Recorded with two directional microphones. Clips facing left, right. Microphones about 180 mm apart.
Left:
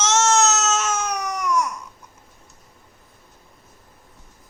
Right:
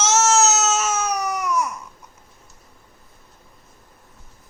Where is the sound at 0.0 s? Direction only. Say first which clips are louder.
Right 1 dB; 5° right (ahead or behind).